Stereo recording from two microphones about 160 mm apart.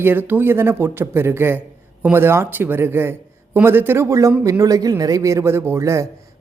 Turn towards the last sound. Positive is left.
turn(degrees=-20)  # may be behind; listen again after turning